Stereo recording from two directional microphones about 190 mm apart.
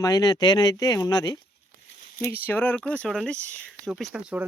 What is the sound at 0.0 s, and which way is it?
Speech, 20° left (ahead or behind).